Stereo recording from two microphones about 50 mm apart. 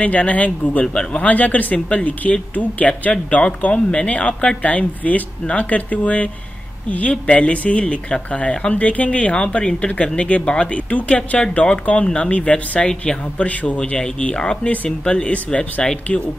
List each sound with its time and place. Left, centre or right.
0.0 s speech: left
12.8 s speech: centre
13.4 s speech: left; by 16.0 s centre